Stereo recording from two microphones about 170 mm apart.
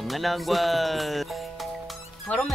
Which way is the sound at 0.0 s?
Centre (ahead or behind).